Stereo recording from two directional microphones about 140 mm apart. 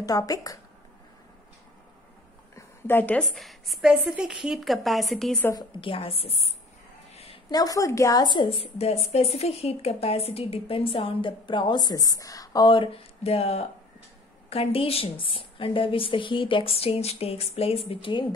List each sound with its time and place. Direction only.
0.0 s speech: 25° left (ahead or behind)
2.5 s a woman's voice: 15° left (ahead or behind)
5.5 s a woman's voice: 35° left (ahead or behind)
7.5 s a woman's voice: 25° left (ahead or behind); by 18.2 s 40° left (ahead or behind)